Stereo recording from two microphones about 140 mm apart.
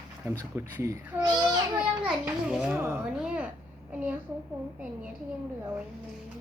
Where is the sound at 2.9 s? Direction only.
5° right (ahead or behind).